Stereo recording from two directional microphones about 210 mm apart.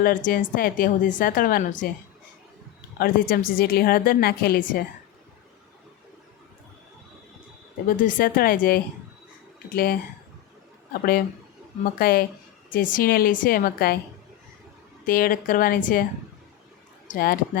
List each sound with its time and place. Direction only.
0.0 s speech: 40° left (ahead or behind)
3.0 s a woman's voice: 45° left (ahead or behind)
7.9 s a woman's voice: 40° left (ahead or behind)
11.9 s a woman's voice: 45° left (ahead or behind)
15.0 s a woman's voice: 40° left (ahead or behind)
17.1 s a woman's voice: 45° left (ahead or behind)